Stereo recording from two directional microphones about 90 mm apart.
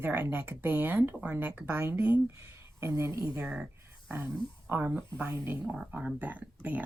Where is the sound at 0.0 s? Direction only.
25° right (ahead or behind).